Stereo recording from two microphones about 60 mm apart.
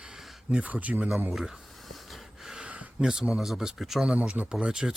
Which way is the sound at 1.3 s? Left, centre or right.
Centre.